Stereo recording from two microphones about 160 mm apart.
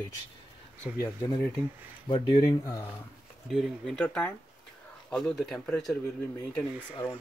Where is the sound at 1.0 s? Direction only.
20° left (ahead or behind).